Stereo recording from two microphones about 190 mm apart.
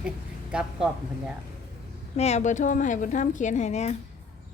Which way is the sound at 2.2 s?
35° left (ahead or behind).